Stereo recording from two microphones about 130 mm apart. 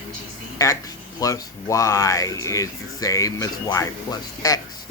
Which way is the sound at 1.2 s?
25° left (ahead or behind).